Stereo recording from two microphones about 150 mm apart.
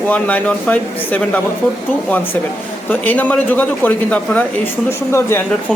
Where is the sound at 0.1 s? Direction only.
10° left (ahead or behind).